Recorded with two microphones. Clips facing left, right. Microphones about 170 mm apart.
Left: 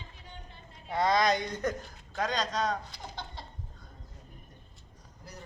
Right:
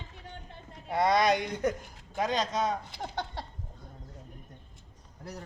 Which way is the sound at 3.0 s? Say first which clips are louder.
Right 7 dB; 65° right (ahead or behind).